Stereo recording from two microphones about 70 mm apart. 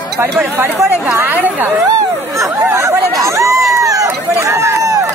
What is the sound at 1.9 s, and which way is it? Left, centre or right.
Chatter, right.